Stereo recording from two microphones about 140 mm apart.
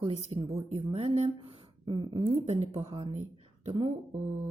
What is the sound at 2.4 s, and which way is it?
Speech, 50° right (ahead or behind).